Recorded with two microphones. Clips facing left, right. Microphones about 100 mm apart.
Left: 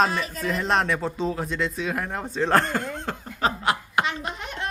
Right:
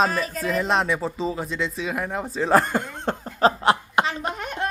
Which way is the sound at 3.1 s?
30° right (ahead or behind).